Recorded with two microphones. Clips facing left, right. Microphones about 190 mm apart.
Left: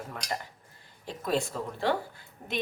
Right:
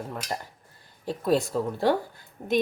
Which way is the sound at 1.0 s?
35° right (ahead or behind).